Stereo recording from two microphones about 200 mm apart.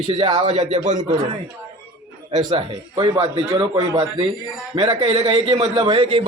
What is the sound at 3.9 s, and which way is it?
A man's voice, 30° right (ahead or behind).